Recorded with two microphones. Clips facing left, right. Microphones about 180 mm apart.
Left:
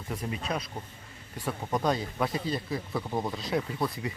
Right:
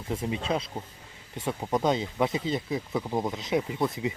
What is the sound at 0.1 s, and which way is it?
Speech, 25° right (ahead or behind).